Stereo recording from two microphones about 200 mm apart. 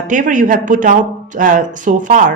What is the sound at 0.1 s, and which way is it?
Speech, 40° right (ahead or behind).